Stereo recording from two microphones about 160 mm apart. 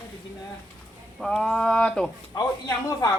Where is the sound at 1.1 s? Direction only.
5° left (ahead or behind).